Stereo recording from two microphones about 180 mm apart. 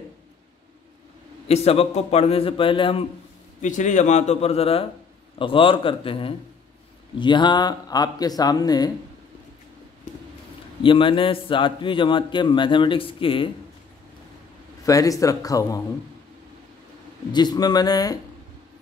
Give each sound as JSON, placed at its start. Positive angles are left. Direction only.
{"t": 1.5, "sound": "a man's voice", "side_deg": 35}
{"t": 3.6, "sound": "a man's voice", "side_deg": 45}
{"t": 10.8, "sound": "a man's voice", "side_deg": 30}
{"t": 14.9, "sound": "a man's voice", "side_deg": 20}
{"t": 17.3, "sound": "a man's voice", "side_deg": 25}